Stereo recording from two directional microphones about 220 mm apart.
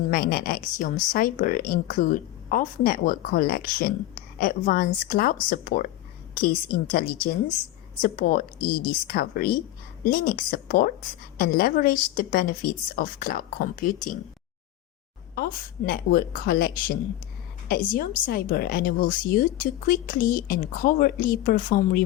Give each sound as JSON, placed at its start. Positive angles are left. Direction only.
{"t": 0.1, "sound": "a woman's voice", "side_deg": 45}
{"t": 15.9, "sound": "a woman's voice", "side_deg": 45}